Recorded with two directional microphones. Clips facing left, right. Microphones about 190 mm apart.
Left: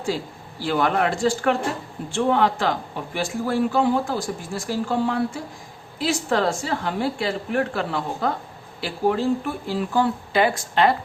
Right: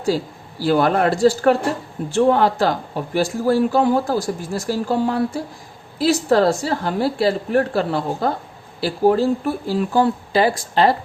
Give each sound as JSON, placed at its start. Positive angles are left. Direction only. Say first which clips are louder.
{"t": 0.6, "sound": "speech", "louder": "right 5 dB", "side_deg": -40}